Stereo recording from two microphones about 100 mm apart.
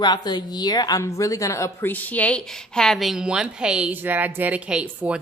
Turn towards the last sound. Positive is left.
turn(degrees=-20)  # may be behind; listen again after turning